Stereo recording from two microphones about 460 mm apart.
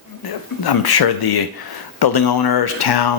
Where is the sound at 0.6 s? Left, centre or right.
Left.